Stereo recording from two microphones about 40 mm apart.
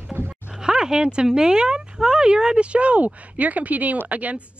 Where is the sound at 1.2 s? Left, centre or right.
Centre.